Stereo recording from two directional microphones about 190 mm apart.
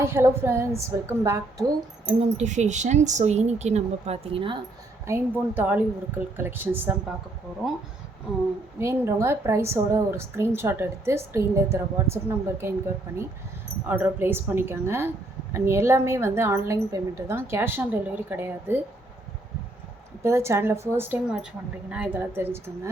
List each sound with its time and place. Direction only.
0.0 s a woman's voice: 15° right (ahead or behind)
2.0 s speech: 35° right (ahead or behind)
5.0 s a woman's voice: 10° right (ahead or behind)
8.8 s a woman's voice: 15° right (ahead or behind)
13.8 s a woman's voice: 10° right (ahead or behind)
20.2 s a woman's voice: 15° right (ahead or behind)